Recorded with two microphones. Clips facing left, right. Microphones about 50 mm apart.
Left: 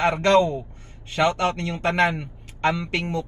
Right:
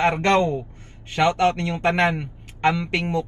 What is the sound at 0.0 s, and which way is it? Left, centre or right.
Speech, right.